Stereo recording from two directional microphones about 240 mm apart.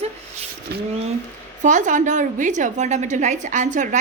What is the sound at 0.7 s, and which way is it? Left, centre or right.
A woman's voice, right.